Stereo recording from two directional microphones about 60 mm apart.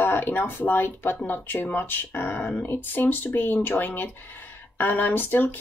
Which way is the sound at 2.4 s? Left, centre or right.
Left.